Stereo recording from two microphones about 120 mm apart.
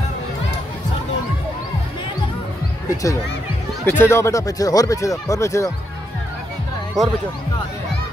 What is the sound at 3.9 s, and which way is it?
Speech, 20° left (ahead or behind).